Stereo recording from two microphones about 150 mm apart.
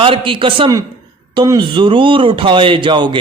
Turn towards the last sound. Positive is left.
turn(degrees=-30)  # may be behind; listen again after turning